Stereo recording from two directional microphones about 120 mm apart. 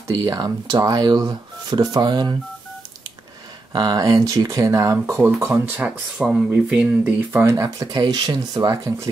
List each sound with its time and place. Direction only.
0.1 s speech: 30° right (ahead or behind)
3.7 s speech: 30° right (ahead or behind)